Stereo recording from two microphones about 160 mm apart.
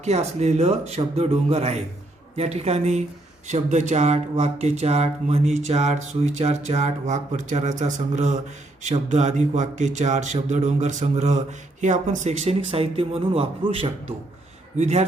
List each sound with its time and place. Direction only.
0.0 s speech: 45° right (ahead or behind)